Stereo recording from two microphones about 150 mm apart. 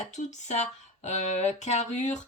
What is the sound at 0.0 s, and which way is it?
A woman's voice, 50° left (ahead or behind).